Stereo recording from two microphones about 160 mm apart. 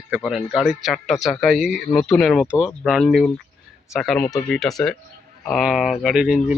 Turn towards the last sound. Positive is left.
turn(degrees=-5)  # may be behind; listen again after turning